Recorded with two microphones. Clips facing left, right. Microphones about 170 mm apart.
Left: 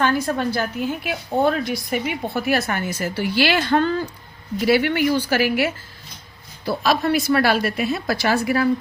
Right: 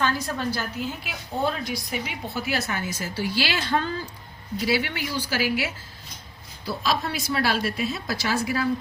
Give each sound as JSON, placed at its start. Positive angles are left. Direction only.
{"t": 0.0, "sound": "a woman's voice", "side_deg": 60}